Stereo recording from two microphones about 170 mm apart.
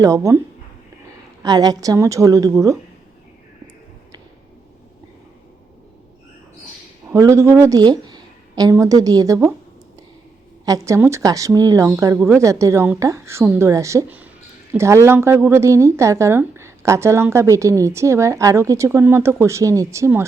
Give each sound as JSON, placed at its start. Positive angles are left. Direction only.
{"t": 0.0, "sound": "a woman's voice", "side_deg": -20}
{"t": 7.1, "sound": "a woman's voice", "side_deg": -20}
{"t": 10.7, "sound": "a woman's voice", "side_deg": -20}